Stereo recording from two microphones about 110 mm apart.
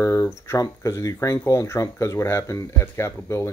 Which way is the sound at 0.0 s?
30° left (ahead or behind).